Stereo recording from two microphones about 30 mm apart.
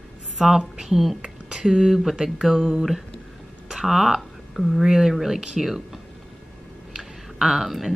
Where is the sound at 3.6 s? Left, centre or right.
Centre.